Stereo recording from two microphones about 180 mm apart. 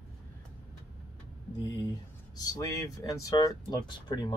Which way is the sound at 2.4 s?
20° left (ahead or behind).